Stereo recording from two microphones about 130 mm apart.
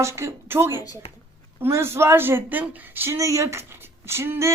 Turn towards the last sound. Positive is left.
turn(degrees=-20)  # may be behind; listen again after turning